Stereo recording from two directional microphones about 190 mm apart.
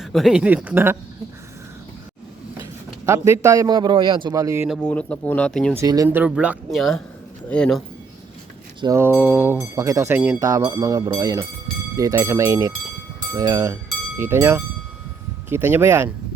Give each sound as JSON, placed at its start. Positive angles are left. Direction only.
{"t": 0.0, "sound": "speech", "side_deg": 0}
{"t": 3.1, "sound": "a man's voice", "side_deg": -15}
{"t": 4.7, "sound": "speech", "side_deg": 5}
{"t": 5.7, "sound": "speech", "side_deg": -15}
{"t": 8.8, "sound": "speech", "side_deg": -15}